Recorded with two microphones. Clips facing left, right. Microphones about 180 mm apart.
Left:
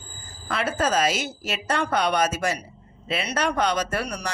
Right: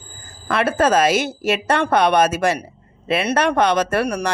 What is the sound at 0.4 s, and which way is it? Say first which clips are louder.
Speech: right 7 dB; 60° right (ahead or behind).